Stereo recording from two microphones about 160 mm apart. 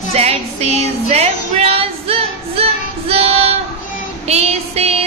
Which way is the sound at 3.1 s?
40° right (ahead or behind).